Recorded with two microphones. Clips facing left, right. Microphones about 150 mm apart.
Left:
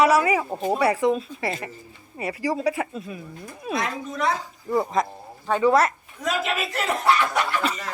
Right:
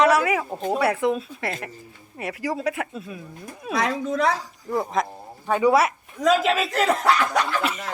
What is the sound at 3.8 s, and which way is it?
Speech, 90° right.